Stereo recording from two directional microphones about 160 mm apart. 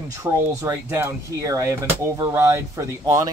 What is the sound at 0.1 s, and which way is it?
Speech, 20° right (ahead or behind).